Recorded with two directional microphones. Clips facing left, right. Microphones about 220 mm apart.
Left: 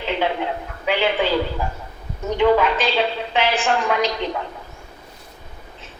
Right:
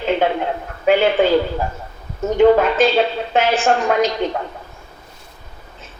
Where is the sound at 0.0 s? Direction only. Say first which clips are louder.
Right 5 dB; 45° right (ahead or behind).